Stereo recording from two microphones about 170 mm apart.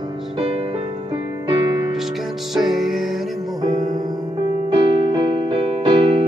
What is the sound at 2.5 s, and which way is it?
Music, centre (ahead or behind).